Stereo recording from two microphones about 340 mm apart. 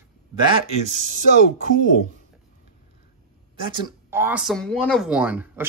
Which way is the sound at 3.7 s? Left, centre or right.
Centre.